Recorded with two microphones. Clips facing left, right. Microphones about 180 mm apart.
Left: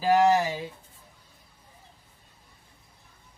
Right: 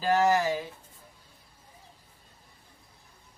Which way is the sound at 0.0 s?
15° left (ahead or behind).